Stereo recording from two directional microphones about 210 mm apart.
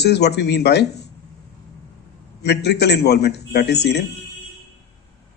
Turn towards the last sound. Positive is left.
turn(degrees=50)  # may be behind; listen again after turning